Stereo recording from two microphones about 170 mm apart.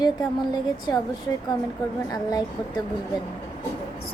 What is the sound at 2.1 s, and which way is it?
Speech, 20° left (ahead or behind).